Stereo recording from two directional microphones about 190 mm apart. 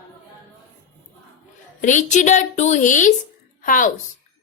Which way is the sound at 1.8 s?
40° left (ahead or behind).